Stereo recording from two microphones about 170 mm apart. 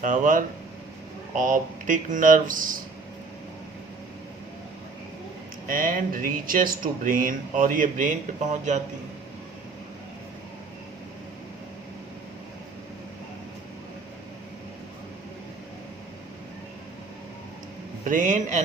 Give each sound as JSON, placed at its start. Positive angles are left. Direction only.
{"t": 0.0, "sound": "speech", "side_deg": -50}
{"t": 5.6, "sound": "speech", "side_deg": -55}
{"t": 18.0, "sound": "speech", "side_deg": -50}